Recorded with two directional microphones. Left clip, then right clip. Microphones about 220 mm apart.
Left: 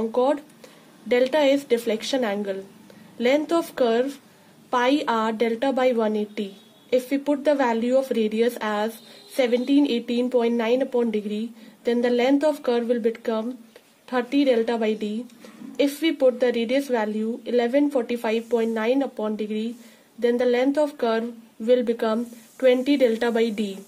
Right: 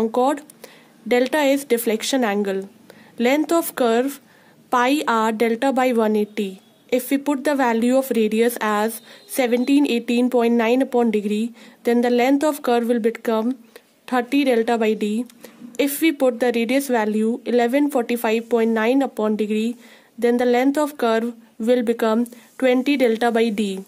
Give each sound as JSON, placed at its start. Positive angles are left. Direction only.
{"t": 0.0, "sound": "speech", "side_deg": -40}